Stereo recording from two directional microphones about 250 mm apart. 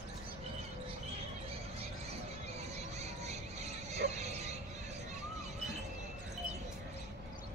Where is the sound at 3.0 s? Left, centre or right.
Right.